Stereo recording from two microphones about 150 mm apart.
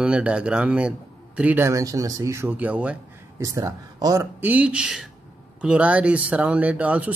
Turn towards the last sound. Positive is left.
turn(degrees=-10)  # may be behind; listen again after turning